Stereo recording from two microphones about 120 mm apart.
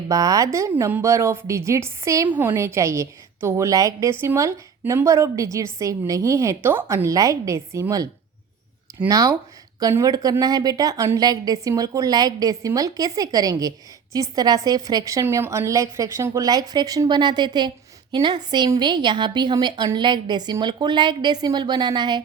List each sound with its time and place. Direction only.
0.1 s a woman's voice: 30° right (ahead or behind)
9.0 s a woman's voice: 30° right (ahead or behind)